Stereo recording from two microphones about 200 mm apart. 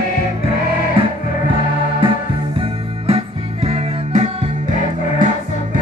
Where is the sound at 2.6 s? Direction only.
30° right (ahead or behind).